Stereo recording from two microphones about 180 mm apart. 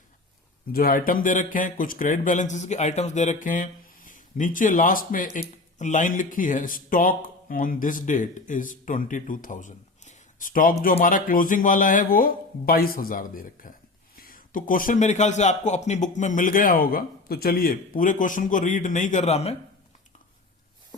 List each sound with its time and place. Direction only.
0.7 s speech: 55° left (ahead or behind); by 19.5 s 35° left (ahead or behind)